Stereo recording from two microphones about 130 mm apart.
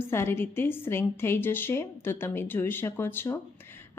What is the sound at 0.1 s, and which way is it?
Speech, 20° left (ahead or behind).